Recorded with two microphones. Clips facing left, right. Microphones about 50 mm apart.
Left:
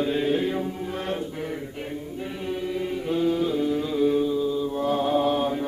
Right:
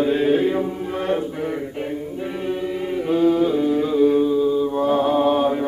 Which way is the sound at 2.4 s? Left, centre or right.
Centre.